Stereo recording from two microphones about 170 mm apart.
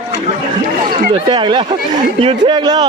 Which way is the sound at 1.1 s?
30° right (ahead or behind).